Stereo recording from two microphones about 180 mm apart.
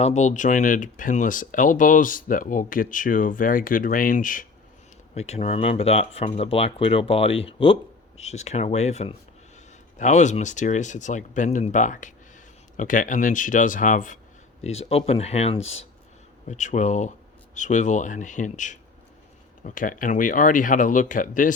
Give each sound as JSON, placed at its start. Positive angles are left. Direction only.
{"t": 0.0, "sound": "speech", "side_deg": 40}
{"t": 5.1, "sound": "speech", "side_deg": 35}
{"t": 14.6, "sound": "speech", "side_deg": 35}